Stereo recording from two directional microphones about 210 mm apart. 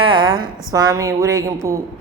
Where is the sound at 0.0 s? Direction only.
20° right (ahead or behind).